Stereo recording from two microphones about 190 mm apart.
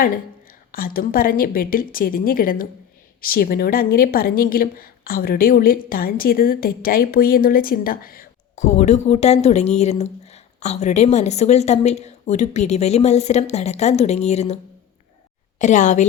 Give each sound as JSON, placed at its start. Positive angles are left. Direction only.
{"t": 0.7, "sound": "a woman's voice", "side_deg": 50}
{"t": 8.5, "sound": "a woman's voice", "side_deg": 35}